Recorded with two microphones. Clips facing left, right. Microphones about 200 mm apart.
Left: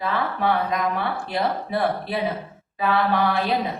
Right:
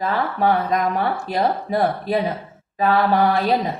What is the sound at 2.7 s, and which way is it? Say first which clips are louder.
Mantra: right 4 dB; 45° right (ahead or behind).